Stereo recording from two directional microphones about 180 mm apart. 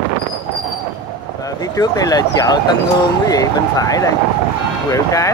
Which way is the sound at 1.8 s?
20° left (ahead or behind).